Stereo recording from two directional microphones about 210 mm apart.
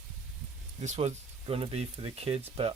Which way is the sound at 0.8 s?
35° right (ahead or behind).